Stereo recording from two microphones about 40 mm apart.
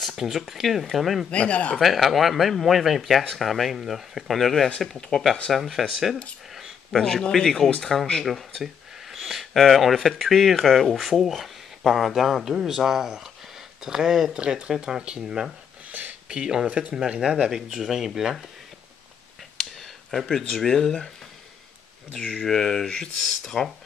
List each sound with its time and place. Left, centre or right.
0.0 s speech: centre
1.3 s speech: left
1.8 s speech: centre
6.5 s a sound: centre
7.1 s speech: centre
9.1 s a sound: centre
9.7 s speech: centre
14.4 s speech: right
15.9 s a sound: right
16.3 s speech: right
17.2 s speech: centre
17.5 s speech: centre
20.1 s speech: centre
22.4 s speech: centre